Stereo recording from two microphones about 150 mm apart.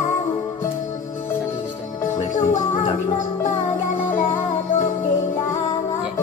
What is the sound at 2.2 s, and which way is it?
Music, 55° left (ahead or behind).